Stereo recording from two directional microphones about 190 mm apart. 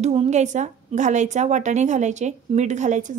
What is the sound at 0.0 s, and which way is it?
A woman's voice, 35° right (ahead or behind).